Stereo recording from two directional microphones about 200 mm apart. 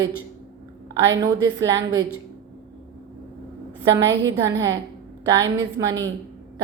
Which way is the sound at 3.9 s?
20° right (ahead or behind).